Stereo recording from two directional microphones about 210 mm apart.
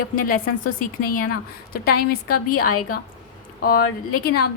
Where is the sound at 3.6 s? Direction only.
45° left (ahead or behind).